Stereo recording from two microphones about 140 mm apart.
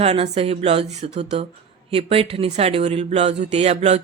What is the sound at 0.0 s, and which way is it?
Speech, 45° right (ahead or behind).